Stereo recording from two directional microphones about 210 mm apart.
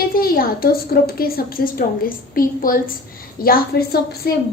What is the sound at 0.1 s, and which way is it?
A woman's voice, 45° left (ahead or behind).